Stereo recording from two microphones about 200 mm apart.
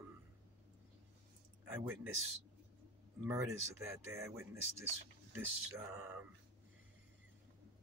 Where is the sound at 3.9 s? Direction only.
15° right (ahead or behind).